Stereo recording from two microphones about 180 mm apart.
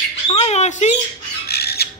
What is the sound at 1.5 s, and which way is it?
Bird, 60° left (ahead or behind).